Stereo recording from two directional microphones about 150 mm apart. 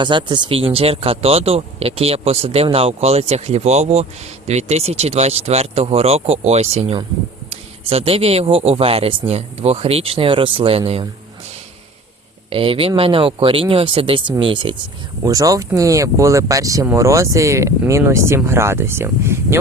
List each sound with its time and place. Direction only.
0.0 s speech: 30° right (ahead or behind)
12.5 s speech: 35° right (ahead or behind); by 19.5 s 15° right (ahead or behind)